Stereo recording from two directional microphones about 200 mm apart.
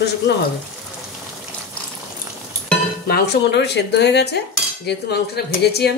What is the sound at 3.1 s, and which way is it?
Speech, 55° left (ahead or behind).